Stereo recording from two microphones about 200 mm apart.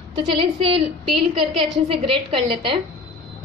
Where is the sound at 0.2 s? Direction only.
25° right (ahead or behind).